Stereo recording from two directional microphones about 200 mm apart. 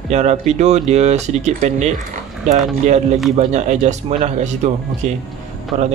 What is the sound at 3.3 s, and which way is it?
Speech, 35° right (ahead or behind).